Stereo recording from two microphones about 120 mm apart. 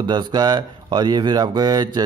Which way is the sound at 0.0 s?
35° right (ahead or behind).